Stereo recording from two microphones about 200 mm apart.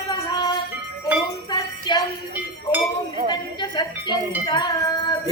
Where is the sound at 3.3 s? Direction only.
20° left (ahead or behind).